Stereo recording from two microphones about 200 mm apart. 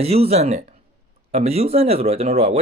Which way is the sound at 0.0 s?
30° right (ahead or behind).